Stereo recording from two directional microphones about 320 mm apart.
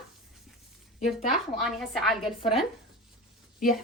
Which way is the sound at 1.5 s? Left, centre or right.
Centre.